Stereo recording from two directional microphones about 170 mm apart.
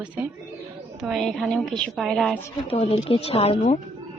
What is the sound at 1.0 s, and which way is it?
A woman's voice, centre (ahead or behind).